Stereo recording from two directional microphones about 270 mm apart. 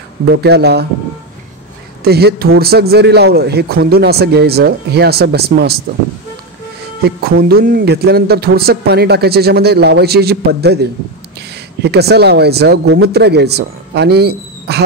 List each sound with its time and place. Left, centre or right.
0.3 s speech: right
2.0 s speech: right
7.0 s speech: right